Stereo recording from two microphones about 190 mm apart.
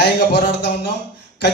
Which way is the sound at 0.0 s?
60° left (ahead or behind).